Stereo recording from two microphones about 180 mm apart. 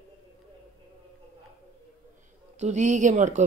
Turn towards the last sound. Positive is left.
turn(degrees=-40)  # may be behind; listen again after turning